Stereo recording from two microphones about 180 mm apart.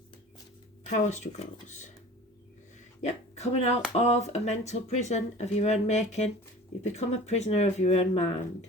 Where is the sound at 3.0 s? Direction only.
40° left (ahead or behind).